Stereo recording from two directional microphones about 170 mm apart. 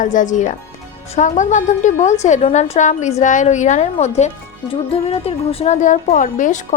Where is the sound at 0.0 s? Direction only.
50° left (ahead or behind).